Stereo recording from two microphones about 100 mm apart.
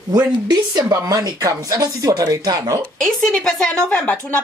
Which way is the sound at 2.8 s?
10° left (ahead or behind).